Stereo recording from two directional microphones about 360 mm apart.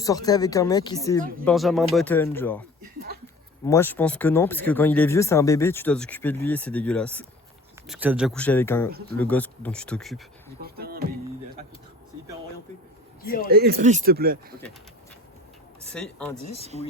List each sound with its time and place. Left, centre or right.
0.0 s speech: centre
3.7 s speech: centre
10.6 s a sound: right
13.5 s speech: right
15.8 s speech: centre